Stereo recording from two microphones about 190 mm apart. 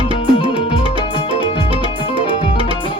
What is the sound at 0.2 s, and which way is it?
Music, 30° left (ahead or behind).